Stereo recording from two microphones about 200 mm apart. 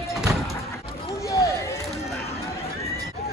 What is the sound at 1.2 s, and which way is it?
Run, 15° left (ahead or behind).